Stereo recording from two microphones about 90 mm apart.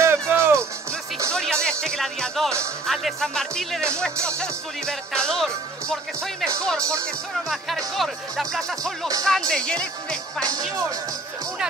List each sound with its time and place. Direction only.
0.0 s music: 30° right (ahead or behind)
1.3 s music: 10° left (ahead or behind)
2.9 s speech: centre (ahead or behind)
4.4 s music: 10° left (ahead or behind)
7.4 s speech: centre (ahead or behind)
9.2 s music: 5° left (ahead or behind)
10.4 s speech: 45° right (ahead or behind)